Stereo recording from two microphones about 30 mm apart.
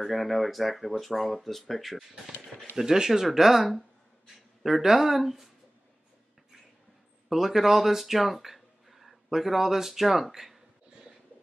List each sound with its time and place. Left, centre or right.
0.0 s speech: centre
2.7 s speech: centre
4.8 s speech: centre
7.2 s speech: centre